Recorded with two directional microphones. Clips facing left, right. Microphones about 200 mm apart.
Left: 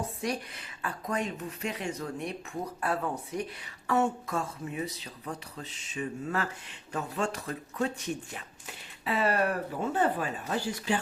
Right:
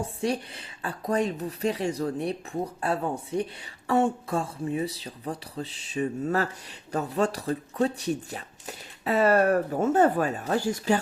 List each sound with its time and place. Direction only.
0.0 s speech: 30° right (ahead or behind)